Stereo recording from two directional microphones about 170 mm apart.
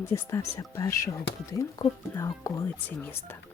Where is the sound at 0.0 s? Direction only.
15° left (ahead or behind).